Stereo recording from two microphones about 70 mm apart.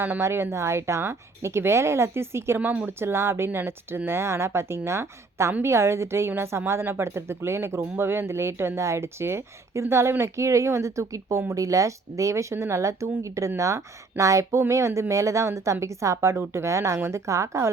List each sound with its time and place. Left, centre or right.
0.2 s speech: right
2.6 s speech: right